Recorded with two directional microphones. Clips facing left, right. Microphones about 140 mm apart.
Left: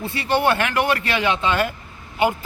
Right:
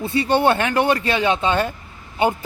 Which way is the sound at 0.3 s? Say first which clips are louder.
Right 1 dB; 25° right (ahead or behind).